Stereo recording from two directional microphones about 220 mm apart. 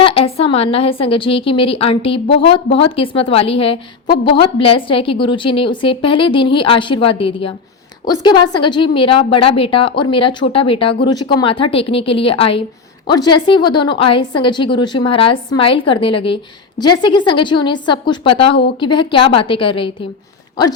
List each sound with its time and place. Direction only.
0.0 s a woman's voice: 25° left (ahead or behind)